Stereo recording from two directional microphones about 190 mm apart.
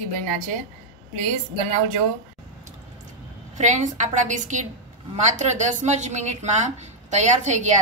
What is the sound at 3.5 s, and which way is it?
A woman's voice, 40° right (ahead or behind).